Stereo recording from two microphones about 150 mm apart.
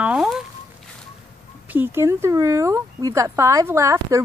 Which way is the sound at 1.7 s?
15° right (ahead or behind).